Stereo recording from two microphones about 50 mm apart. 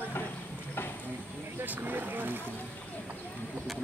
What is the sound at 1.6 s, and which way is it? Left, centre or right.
Speech, right.